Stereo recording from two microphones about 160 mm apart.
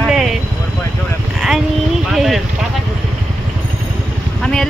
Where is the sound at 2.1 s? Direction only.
Centre (ahead or behind).